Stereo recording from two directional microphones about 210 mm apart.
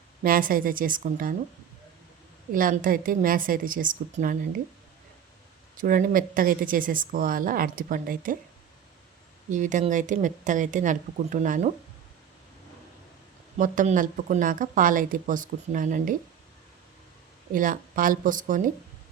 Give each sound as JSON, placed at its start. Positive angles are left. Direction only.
{"t": 0.2, "sound": "a woman's voice", "side_deg": -40}
{"t": 2.5, "sound": "a woman's voice", "side_deg": -40}
{"t": 5.7, "sound": "a woman's voice", "side_deg": -40}
{"t": 9.5, "sound": "a woman's voice", "side_deg": -35}
{"t": 13.6, "sound": "a woman's voice", "side_deg": -40}
{"t": 17.5, "sound": "a woman's voice", "side_deg": -40}